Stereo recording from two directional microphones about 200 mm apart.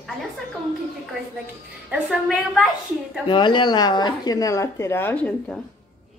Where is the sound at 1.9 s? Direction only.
5° right (ahead or behind).